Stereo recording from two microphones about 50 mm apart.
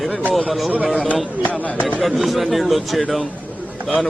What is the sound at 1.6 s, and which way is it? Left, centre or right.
Speech, left.